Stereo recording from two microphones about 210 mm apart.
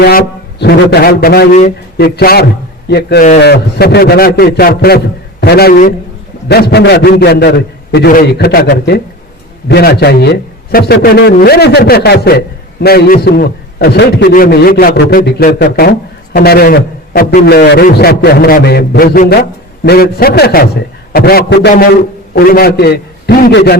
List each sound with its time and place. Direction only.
0.0 s a man's voice: 45° left (ahead or behind)
1.5 s a man's voice: 35° left (ahead or behind)
2.1 s a man's voice: 45° left (ahead or behind)